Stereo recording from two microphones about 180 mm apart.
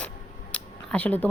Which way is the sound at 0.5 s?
5° left (ahead or behind).